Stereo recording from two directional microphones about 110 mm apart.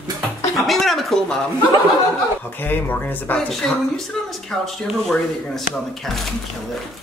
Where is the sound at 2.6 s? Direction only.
20° left (ahead or behind).